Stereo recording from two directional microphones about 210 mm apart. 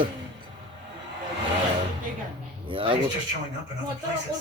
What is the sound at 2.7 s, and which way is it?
Speech, 25° right (ahead or behind).